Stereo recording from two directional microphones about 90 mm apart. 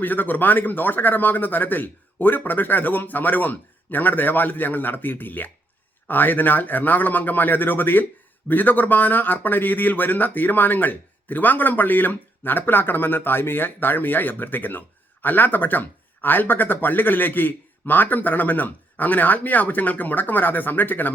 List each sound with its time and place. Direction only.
0.0 s speech: 20° left (ahead or behind)